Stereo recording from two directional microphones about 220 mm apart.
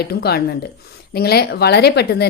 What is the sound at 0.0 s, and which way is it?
A woman's voice, 45° left (ahead or behind).